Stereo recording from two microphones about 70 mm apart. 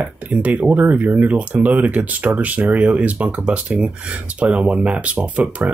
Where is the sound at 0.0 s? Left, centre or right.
Right.